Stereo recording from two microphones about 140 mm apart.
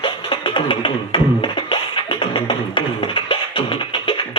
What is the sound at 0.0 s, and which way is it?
Music, 35° left (ahead or behind).